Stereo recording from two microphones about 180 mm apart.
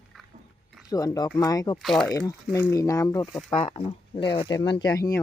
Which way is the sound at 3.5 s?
30° left (ahead or behind).